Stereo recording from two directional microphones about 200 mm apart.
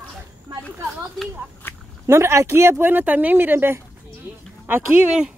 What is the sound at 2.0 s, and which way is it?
Speech, 15° right (ahead or behind).